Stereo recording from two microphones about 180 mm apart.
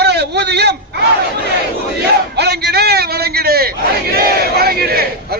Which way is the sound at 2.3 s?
65° right (ahead or behind).